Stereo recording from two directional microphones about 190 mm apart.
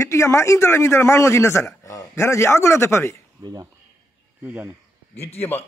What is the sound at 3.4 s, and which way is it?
Speech, 20° right (ahead or behind).